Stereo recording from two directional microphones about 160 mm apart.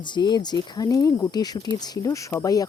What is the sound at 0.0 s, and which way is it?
Speech, 30° left (ahead or behind).